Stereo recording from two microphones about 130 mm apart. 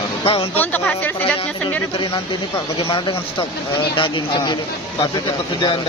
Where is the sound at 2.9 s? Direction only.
45° left (ahead or behind).